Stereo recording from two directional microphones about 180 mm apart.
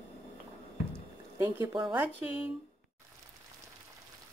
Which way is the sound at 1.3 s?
20° right (ahead or behind).